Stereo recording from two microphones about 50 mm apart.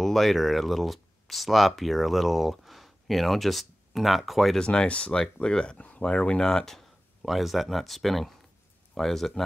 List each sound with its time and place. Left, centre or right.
0.0 s speech: centre
4.6 s speech: centre
5.2 s speech: centre